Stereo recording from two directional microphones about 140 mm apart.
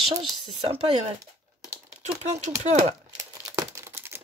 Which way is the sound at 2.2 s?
55° right (ahead or behind).